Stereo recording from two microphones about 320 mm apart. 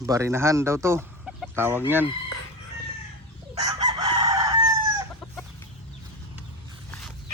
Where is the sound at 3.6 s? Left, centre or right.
Centre.